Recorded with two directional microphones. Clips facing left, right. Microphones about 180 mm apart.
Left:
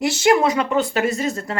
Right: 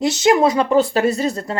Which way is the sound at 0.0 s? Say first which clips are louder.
Right 2 dB; 20° right (ahead or behind).